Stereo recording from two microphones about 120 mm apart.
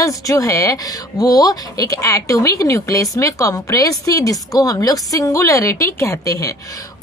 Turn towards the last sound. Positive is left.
turn(degrees=30)  # may be behind; listen again after turning